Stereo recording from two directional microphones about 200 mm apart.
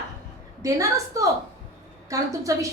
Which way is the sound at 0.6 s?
15° right (ahead or behind).